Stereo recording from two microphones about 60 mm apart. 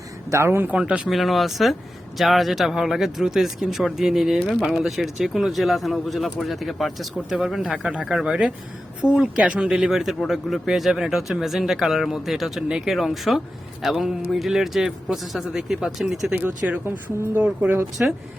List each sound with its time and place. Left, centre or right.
0.3 s speech: right
0.7 s speech: centre
1.0 s speech: centre
7.7 s speech: centre
9.9 s speech: centre
12.6 s speech: centre
12.9 s speech: centre
16.3 s speech: right